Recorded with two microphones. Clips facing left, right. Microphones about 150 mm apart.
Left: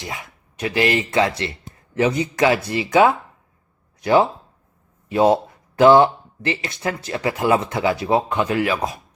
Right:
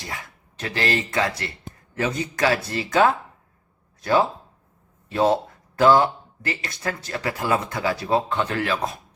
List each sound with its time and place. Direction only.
0.0 s speech: 20° left (ahead or behind)